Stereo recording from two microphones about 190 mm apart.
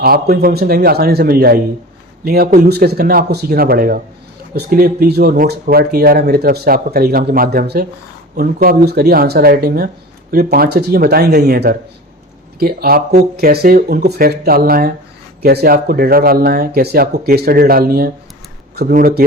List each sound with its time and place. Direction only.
0.0 s a man's voice: 50° right (ahead or behind)